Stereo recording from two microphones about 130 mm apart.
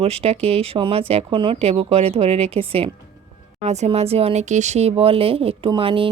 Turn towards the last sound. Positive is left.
turn(degrees=-45)  # may be behind; listen again after turning